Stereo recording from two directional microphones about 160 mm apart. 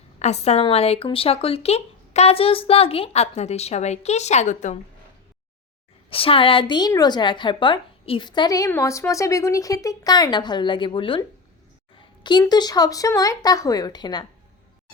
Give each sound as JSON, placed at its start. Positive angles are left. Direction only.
{"t": 0.2, "sound": "speech", "side_deg": 45}
{"t": 6.1, "sound": "a woman's voice", "side_deg": 35}